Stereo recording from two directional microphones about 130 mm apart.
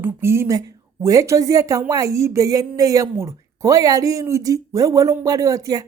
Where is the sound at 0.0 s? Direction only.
20° right (ahead or behind).